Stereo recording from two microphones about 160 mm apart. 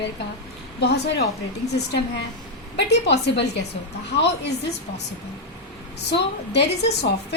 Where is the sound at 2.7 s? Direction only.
90° left.